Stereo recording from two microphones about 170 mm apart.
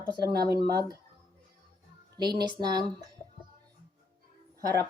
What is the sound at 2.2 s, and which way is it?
Speech, 25° right (ahead or behind).